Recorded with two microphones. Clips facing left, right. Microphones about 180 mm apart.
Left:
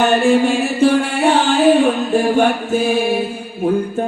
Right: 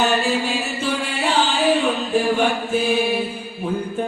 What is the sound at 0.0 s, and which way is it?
Music, 55° left (ahead or behind).